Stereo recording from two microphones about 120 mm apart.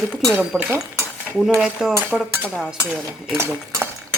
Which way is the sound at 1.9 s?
15° right (ahead or behind).